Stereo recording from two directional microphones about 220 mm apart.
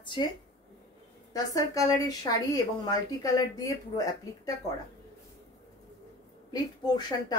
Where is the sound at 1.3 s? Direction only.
15° left (ahead or behind).